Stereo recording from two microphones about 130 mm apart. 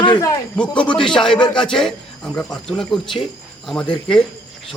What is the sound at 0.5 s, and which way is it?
Speech, 10° left (ahead or behind).